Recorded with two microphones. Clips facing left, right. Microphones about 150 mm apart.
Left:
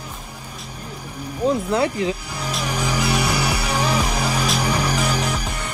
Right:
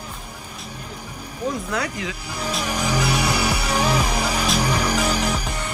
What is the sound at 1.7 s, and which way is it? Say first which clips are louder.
Speech: left 6 dB; 30° left (ahead or behind).